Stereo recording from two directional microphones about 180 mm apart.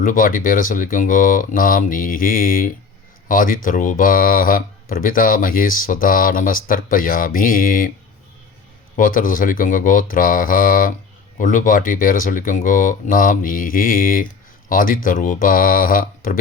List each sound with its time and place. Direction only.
0.0 s speech: 50° left (ahead or behind)
9.0 s speech: 50° left (ahead or behind)